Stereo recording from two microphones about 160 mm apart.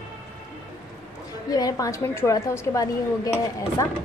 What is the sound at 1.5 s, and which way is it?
A woman's voice, 20° left (ahead or behind).